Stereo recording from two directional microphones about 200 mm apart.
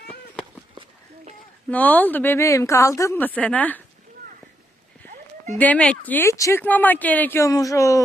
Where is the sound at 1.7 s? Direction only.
10° left (ahead or behind).